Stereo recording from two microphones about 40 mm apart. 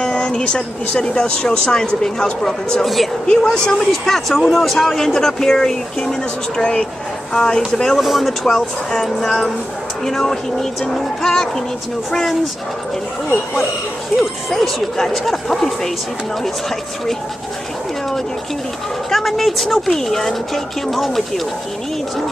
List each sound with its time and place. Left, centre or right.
0.0 s speech: left
2.8 s a woman's voice: centre
3.3 s speech: centre
6.6 s speech: left
8.0 s a woman's voice: centre
8.3 s a woman's voice: centre
14.1 s a woman's voice: centre
19.0 s a woman's voice: centre